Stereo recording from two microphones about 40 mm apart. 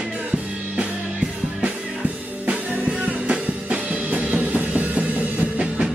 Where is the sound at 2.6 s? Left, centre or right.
Right.